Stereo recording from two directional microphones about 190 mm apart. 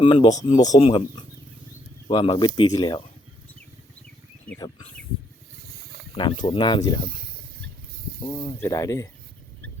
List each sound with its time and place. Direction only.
0.0 s speech: 25° left (ahead or behind)
0.6 s speech: 20° left (ahead or behind)
4.4 s speech: 10° left (ahead or behind)
6.4 s speech: 25° left (ahead or behind)
8.6 s speech: 15° left (ahead or behind)